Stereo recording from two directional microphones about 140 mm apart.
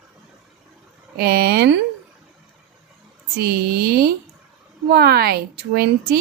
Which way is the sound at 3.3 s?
90° right.